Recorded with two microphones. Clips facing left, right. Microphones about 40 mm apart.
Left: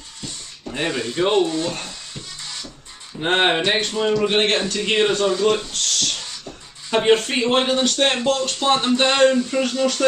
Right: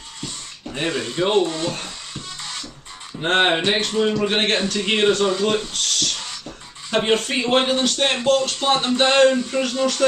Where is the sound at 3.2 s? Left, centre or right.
Centre.